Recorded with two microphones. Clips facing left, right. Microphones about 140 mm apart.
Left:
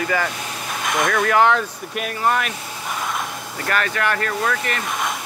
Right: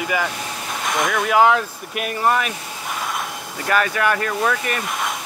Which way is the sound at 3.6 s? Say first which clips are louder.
Right 3 dB; 10° right (ahead or behind).